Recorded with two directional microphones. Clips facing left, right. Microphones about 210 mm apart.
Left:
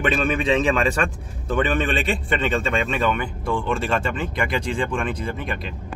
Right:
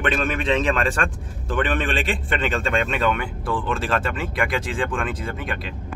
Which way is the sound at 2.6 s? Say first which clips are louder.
Even; centre (ahead or behind).